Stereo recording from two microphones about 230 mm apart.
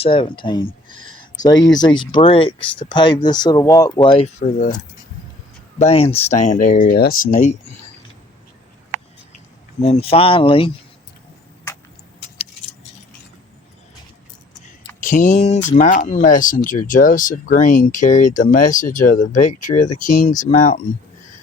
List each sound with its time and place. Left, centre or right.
0.0 s speech: left
5.8 s speech: left
9.8 s speech: left
15.0 s speech: left